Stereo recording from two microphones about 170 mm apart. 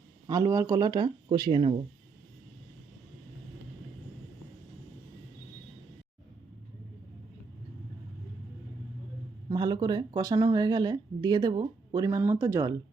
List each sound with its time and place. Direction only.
0.3 s speech: 20° right (ahead or behind)
9.5 s speech: 25° right (ahead or behind)